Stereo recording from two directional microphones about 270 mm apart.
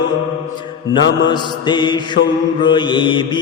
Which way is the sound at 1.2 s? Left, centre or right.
Centre.